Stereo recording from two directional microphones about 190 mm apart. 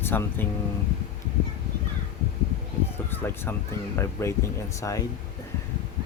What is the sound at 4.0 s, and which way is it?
Speech, 15° left (ahead or behind).